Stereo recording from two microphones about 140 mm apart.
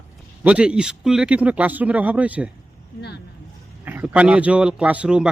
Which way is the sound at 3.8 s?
15° right (ahead or behind).